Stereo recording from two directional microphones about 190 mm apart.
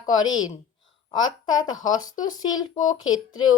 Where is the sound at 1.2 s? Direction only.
90° left.